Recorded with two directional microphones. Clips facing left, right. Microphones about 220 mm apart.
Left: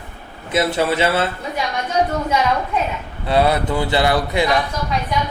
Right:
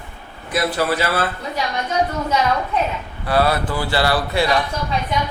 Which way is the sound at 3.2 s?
20° left (ahead or behind).